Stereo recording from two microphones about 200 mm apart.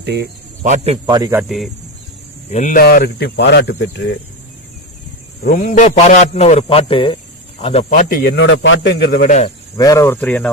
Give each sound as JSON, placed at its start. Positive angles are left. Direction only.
{"t": 0.0, "sound": "speech", "side_deg": -55}
{"t": 0.6, "sound": "speech", "side_deg": -35}
{"t": 1.0, "sound": "speech", "side_deg": -20}
{"t": 1.4, "sound": "speech", "side_deg": 0}
{"t": 2.5, "sound": "speech", "side_deg": 40}
{"t": 5.4, "sound": "a man's voice", "side_deg": 45}
{"t": 8.2, "sound": "speech", "side_deg": 60}
{"t": 9.7, "sound": "speech", "side_deg": 15}